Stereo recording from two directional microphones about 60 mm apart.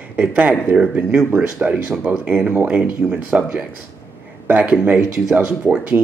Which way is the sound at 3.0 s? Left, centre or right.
Centre.